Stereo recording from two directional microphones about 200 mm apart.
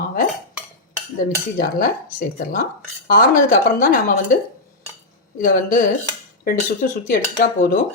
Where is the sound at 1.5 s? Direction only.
45° left (ahead or behind).